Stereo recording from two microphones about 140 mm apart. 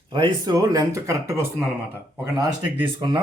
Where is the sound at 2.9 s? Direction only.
35° right (ahead or behind).